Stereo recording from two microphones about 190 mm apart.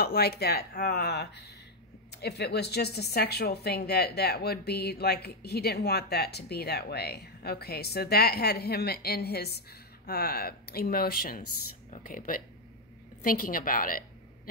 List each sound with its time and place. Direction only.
0.0 s a woman's voice: 55° left (ahead or behind)